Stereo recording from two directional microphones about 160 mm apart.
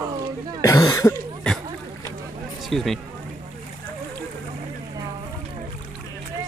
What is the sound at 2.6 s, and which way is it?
Speech, centre (ahead or behind).